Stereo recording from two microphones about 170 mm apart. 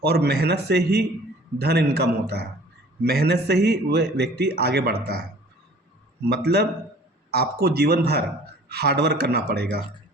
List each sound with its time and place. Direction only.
0.0 s a man's voice: 70° right (ahead or behind)
6.2 s a man's voice: 75° right (ahead or behind)